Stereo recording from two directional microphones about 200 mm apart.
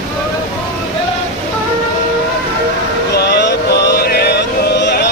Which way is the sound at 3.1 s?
55° left (ahead or behind).